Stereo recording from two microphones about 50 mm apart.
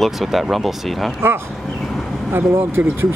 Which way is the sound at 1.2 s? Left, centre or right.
Right.